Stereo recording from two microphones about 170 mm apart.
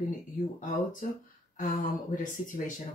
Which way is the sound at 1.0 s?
55° left (ahead or behind).